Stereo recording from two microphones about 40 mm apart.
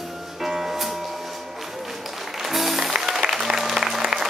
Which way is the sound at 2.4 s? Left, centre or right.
Centre.